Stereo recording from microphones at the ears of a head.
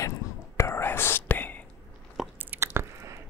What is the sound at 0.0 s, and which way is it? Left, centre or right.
Whispering, left.